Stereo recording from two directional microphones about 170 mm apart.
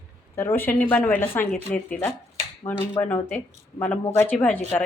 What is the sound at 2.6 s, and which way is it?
A woman's voice, 15° left (ahead or behind).